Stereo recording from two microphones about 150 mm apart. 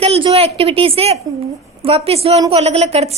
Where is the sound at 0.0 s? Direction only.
40° right (ahead or behind).